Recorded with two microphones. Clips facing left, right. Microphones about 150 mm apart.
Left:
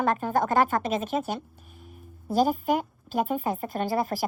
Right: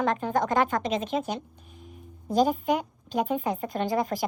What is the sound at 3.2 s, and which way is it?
Speech, 45° left (ahead or behind).